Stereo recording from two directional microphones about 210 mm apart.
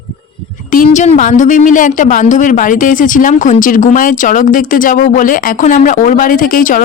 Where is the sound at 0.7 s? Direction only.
35° left (ahead or behind).